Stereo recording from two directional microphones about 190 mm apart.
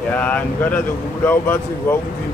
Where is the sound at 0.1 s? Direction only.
10° left (ahead or behind).